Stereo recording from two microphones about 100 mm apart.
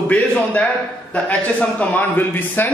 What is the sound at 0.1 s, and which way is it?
A man's voice, 15° left (ahead or behind).